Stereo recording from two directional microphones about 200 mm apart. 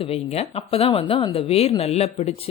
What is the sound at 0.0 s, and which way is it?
A woman's voice, 30° left (ahead or behind).